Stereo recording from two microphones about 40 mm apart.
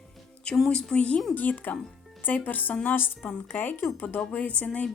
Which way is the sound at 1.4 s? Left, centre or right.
Left.